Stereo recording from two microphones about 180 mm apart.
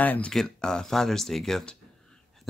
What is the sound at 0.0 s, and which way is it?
Speech, 10° left (ahead or behind).